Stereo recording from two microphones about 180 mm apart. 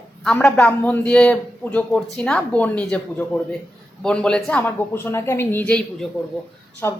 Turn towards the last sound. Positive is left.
turn(degrees=15)  # may be behind; listen again after turning